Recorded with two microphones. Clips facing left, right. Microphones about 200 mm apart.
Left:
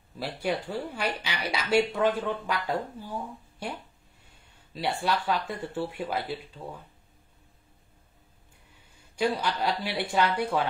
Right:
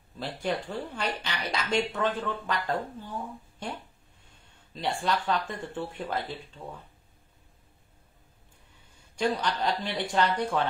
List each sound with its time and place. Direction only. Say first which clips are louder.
0.4 s a woman's voice: left 1 dB; 10° left (ahead or behind)
4.7 s a woman's voice: left 1 dB; 10° left (ahead or behind)
9.1 s a woman's voice: left 1 dB; 10° left (ahead or behind)